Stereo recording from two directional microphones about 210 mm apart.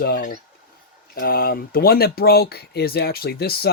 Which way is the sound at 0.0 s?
40° left (ahead or behind).